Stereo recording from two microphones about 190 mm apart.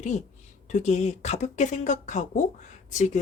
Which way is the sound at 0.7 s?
40° left (ahead or behind).